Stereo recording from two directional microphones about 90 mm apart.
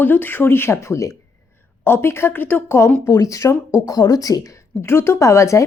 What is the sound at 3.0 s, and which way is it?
A woman's voice, 35° left (ahead or behind).